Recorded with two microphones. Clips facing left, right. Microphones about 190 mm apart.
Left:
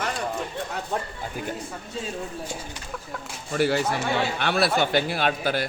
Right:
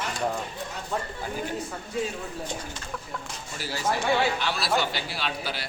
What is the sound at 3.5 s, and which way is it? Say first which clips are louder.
A man's voice: left 7 dB; 60° left (ahead or behind).